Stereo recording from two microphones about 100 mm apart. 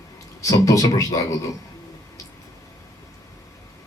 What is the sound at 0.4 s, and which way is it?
Speech, 35° left (ahead or behind).